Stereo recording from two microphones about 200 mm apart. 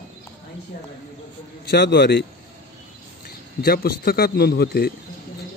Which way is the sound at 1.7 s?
55° left (ahead or behind).